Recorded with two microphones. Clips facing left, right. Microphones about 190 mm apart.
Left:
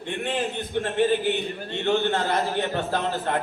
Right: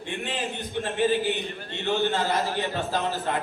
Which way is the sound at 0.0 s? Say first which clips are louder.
Left 4 dB; 55° left (ahead or behind).